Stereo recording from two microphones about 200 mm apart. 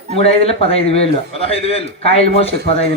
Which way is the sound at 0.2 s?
30° left (ahead or behind).